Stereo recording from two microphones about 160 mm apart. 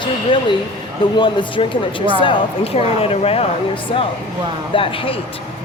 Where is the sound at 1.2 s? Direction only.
30° left (ahead or behind).